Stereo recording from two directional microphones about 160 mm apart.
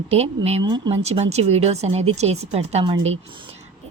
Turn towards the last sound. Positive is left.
turn(degrees=-30)  # may be behind; listen again after turning